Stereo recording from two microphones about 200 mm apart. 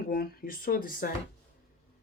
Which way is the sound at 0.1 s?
45° left (ahead or behind).